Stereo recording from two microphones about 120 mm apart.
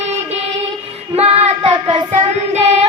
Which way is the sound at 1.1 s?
55° right (ahead or behind).